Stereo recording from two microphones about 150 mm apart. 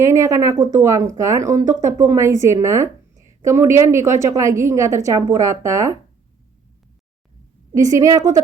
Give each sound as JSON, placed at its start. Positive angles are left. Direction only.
{"t": 0.0, "sound": "a woman's voice", "side_deg": -20}
{"t": 7.7, "sound": "a woman's voice", "side_deg": -20}